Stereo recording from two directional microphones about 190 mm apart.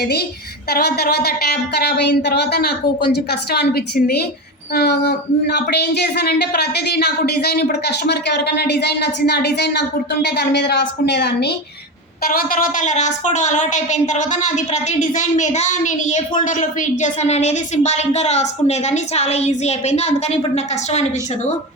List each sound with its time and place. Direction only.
0.0 s speech: 55° left (ahead or behind)
12.2 s speech: 50° left (ahead or behind); by 20.4 s 35° left (ahead or behind)